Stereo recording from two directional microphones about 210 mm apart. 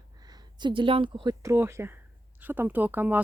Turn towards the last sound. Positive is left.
turn(degrees=-10)  # may be behind; listen again after turning